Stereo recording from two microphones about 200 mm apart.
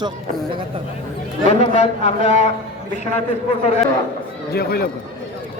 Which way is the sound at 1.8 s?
30° left (ahead or behind).